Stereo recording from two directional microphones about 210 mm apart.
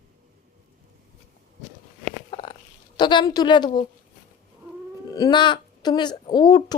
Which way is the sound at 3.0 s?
20° left (ahead or behind).